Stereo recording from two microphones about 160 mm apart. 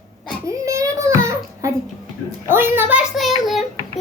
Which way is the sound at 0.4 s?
20° right (ahead or behind).